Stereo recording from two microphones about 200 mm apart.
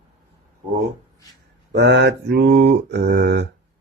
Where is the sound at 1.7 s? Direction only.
60° right (ahead or behind).